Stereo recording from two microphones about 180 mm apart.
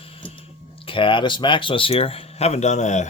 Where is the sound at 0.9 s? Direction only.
30° left (ahead or behind).